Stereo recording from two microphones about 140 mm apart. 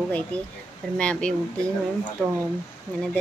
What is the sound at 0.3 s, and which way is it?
Speech, 10° left (ahead or behind).